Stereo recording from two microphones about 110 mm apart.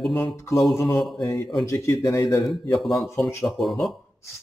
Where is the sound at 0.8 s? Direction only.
Centre (ahead or behind).